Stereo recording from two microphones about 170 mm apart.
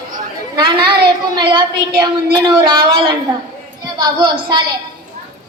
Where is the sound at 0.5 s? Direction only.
25° right (ahead or behind).